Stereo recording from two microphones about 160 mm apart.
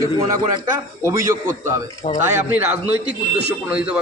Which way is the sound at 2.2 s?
10° right (ahead or behind).